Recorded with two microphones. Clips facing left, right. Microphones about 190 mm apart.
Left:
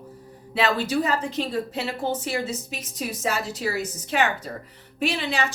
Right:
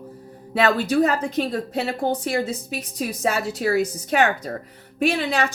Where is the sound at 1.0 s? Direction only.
60° right (ahead or behind).